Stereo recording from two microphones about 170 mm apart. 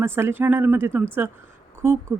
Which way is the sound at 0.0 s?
15° right (ahead or behind).